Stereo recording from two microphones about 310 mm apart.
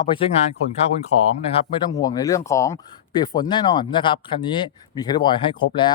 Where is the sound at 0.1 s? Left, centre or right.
Centre.